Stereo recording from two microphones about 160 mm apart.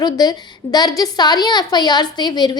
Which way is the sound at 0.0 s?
25° left (ahead or behind).